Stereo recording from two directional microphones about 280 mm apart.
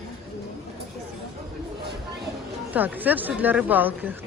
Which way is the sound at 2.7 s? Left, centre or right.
Centre.